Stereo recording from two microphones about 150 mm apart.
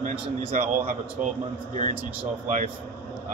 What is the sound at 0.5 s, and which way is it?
A man's voice, 65° right (ahead or behind).